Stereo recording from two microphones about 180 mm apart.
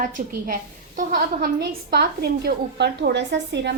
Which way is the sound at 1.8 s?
60° right (ahead or behind).